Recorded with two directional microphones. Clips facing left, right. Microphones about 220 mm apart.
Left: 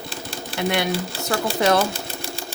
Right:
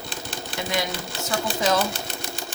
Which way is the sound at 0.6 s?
65° left (ahead or behind).